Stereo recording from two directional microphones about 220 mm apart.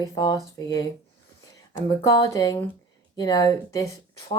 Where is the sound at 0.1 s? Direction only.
20° left (ahead or behind).